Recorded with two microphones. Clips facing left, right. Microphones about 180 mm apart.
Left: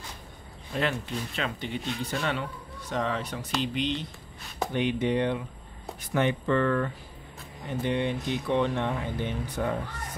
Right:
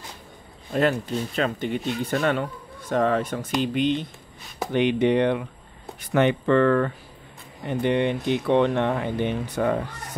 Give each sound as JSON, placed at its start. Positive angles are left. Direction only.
{"t": 0.7, "sound": "speech", "side_deg": -40}
{"t": 4.7, "sound": "speech", "side_deg": -75}